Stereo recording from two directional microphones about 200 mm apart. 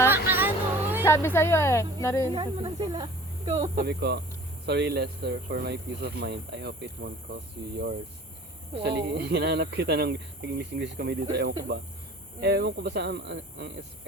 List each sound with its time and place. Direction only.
0.1 s music: 10° right (ahead or behind)
1.0 s speech: 10° left (ahead or behind)
2.3 s speech: 25° right (ahead or behind)
3.8 s speech: 55° right (ahead or behind)
8.7 s speech: 55° right (ahead or behind)